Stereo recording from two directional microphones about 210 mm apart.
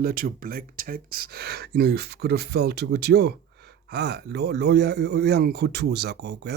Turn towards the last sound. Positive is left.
turn(degrees=-50)  # may be behind; listen again after turning